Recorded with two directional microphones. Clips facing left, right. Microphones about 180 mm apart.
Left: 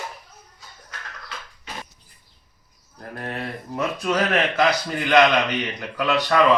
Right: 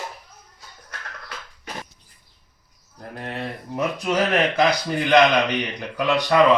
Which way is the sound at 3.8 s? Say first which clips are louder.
Right 1 dB; 15° right (ahead or behind).